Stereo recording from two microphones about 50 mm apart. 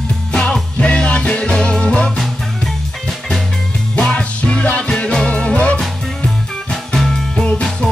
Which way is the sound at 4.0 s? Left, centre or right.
Left.